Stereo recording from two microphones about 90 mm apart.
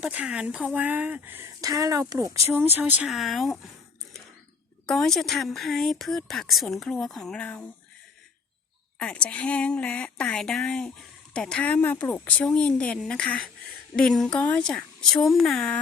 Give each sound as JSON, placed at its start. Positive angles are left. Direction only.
{"t": 0.0, "sound": "speech", "side_deg": -15}
{"t": 1.5, "sound": "speech", "side_deg": -40}
{"t": 2.5, "sound": "speech", "side_deg": -25}
{"t": 3.1, "sound": "speech", "side_deg": 0}
{"t": 4.9, "sound": "speech", "side_deg": 5}
{"t": 9.0, "sound": "speech", "side_deg": 10}
{"t": 12.5, "sound": "speech", "side_deg": 10}